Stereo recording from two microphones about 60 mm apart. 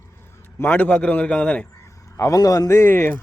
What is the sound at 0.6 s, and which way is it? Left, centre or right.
A man's voice, left.